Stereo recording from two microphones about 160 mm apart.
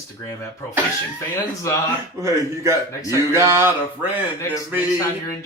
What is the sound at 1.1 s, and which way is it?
Speech, 20° left (ahead or behind).